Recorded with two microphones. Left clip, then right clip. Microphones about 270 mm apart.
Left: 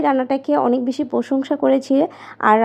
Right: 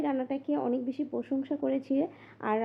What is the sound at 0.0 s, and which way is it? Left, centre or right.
Speech, centre.